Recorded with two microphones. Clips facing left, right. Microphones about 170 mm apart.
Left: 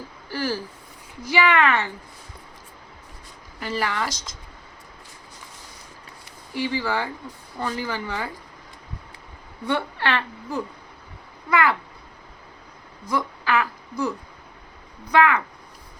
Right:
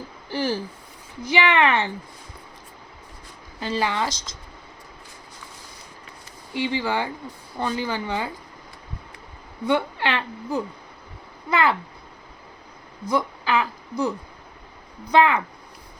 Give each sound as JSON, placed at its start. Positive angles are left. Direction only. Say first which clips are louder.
{"t": 0.3, "sound": "speech", "louder": "right 2 dB", "side_deg": -20}
{"t": 3.6, "sound": "speech", "louder": "right 2 dB", "side_deg": -20}
{"t": 6.5, "sound": "speech", "louder": "right 1 dB", "side_deg": -20}
{"t": 9.6, "sound": "speech", "louder": "right 2 dB", "side_deg": -15}
{"t": 13.1, "sound": "speech", "louder": "right 1 dB", "side_deg": -20}
{"t": 15.1, "sound": "speech", "louder": "right 1 dB", "side_deg": -25}